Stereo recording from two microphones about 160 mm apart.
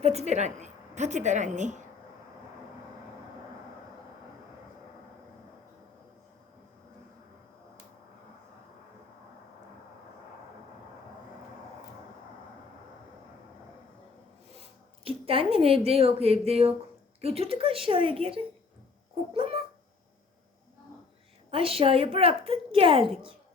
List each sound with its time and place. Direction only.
0.0 s a woman's voice: 40° right (ahead or behind)
15.0 s a woman's voice: 35° right (ahead or behind)
21.5 s a woman's voice: 35° right (ahead or behind)